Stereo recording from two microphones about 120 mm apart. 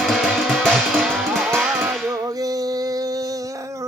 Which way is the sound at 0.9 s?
15° right (ahead or behind).